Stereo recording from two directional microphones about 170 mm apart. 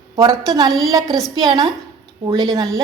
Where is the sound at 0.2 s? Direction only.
25° right (ahead or behind).